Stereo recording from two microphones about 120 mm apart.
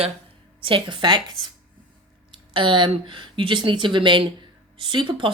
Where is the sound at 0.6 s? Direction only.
45° right (ahead or behind).